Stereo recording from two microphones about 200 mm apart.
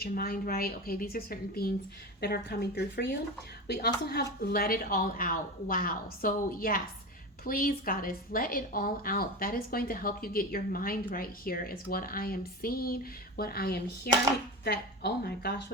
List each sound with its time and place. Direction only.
0.0 s a woman's voice: 50° left (ahead or behind)